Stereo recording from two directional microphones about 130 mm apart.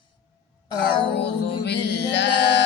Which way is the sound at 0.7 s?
40° left (ahead or behind).